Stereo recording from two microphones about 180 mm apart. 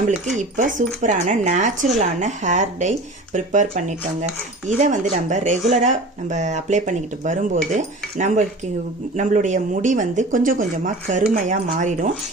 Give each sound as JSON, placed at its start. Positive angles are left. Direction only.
{"t": 0.3, "sound": "speech", "side_deg": -45}
{"t": 9.1, "sound": "speech", "side_deg": -40}